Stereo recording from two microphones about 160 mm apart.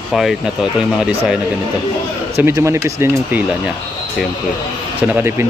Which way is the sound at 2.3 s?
15° right (ahead or behind).